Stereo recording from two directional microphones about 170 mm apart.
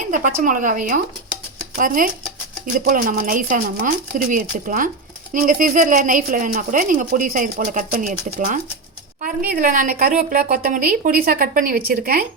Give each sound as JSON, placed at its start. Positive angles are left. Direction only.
{"t": 0.1, "sound": "a woman's voice", "side_deg": -50}